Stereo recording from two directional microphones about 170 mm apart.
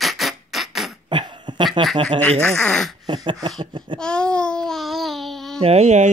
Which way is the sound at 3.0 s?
25° right (ahead or behind).